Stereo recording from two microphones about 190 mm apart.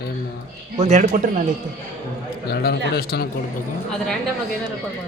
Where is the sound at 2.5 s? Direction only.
55° left (ahead or behind).